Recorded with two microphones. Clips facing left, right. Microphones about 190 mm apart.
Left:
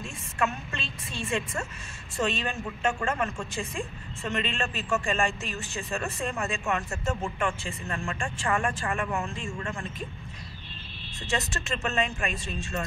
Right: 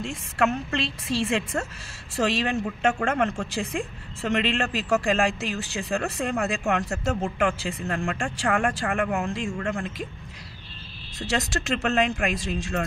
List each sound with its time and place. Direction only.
0.0 s a woman's voice: 80° right
11.1 s a woman's voice: 85° right